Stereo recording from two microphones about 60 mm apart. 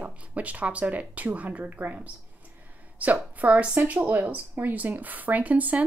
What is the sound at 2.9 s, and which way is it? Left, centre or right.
Speech, right.